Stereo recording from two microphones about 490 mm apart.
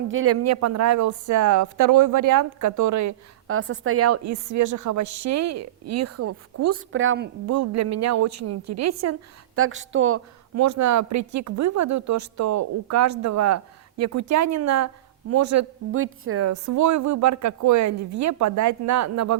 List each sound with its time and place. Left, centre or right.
0.1 s a woman's voice: right